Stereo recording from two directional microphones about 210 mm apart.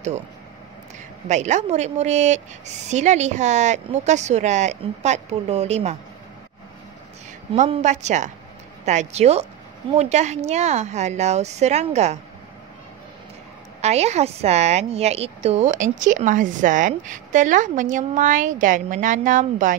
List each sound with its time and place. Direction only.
1.3 s a woman's voice: 35° right (ahead or behind)
7.5 s a woman's voice: 35° right (ahead or behind)
13.7 s a woman's voice: 30° right (ahead or behind)